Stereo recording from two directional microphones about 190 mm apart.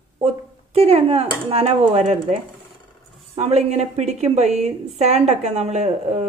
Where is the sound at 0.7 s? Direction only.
30° right (ahead or behind).